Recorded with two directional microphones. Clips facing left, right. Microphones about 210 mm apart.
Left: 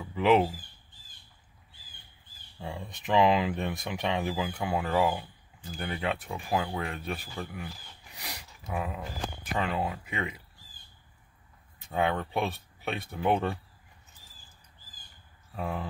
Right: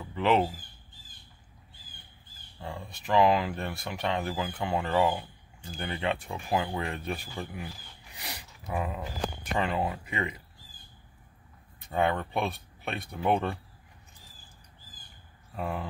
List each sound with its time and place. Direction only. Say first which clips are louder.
0.0 s a sound: left 2 dB; 10° left (ahead or behind)
2.6 s speech: left 1 dB; 15° left (ahead or behind)
11.8 s speech: right 1 dB; centre (ahead or behind)
15.5 s speech: even; centre (ahead or behind)